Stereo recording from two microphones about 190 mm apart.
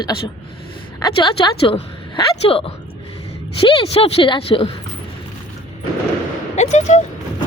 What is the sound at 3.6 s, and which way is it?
A woman's voice, 30° left (ahead or behind).